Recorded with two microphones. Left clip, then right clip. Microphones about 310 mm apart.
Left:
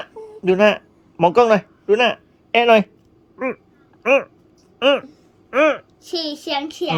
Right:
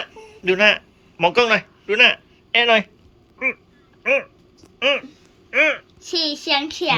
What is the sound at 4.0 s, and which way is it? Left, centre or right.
Speech, left.